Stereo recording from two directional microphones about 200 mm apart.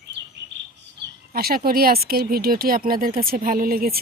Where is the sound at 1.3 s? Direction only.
50° right (ahead or behind).